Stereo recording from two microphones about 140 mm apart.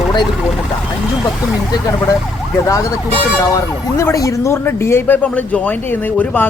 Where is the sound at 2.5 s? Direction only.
25° left (ahead or behind).